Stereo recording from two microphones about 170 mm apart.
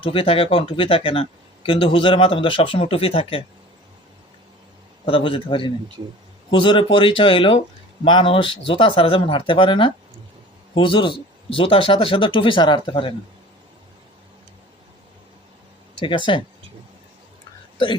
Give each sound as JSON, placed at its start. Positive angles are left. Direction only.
{"t": 0.0, "sound": "speech", "side_deg": 30}
{"t": 5.0, "sound": "a man's voice", "side_deg": 30}
{"t": 16.0, "sound": "a man's voice", "side_deg": 30}